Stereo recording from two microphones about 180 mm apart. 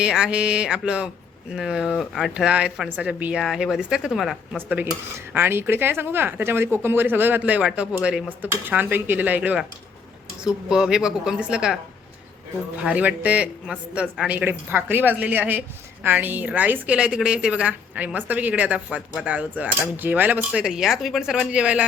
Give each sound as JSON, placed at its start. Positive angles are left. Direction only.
{"t": 0.0, "sound": "speech", "side_deg": -5}